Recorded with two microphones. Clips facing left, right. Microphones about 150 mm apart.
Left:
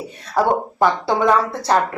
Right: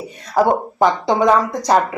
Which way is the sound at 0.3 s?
15° right (ahead or behind).